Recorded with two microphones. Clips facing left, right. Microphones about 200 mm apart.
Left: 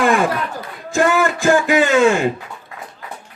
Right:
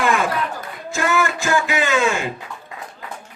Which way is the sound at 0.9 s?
50° left (ahead or behind).